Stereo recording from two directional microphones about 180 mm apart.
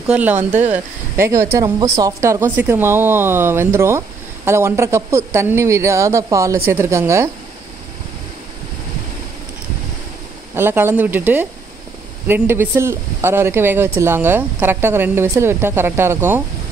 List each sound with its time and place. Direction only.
0.0 s speech: 5° right (ahead or behind)
10.5 s speech: 15° right (ahead or behind)